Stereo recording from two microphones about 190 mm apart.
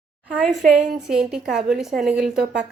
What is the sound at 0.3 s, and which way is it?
A woman's voice, 5° right (ahead or behind).